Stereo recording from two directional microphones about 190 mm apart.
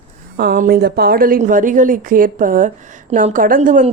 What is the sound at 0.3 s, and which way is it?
A woman's voice, 50° right (ahead or behind).